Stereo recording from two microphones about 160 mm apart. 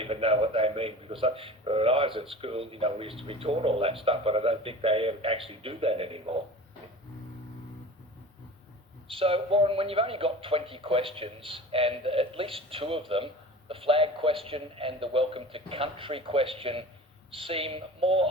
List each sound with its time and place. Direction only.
0.0 s speech: 35° right (ahead or behind)
9.0 s speech: 35° right (ahead or behind)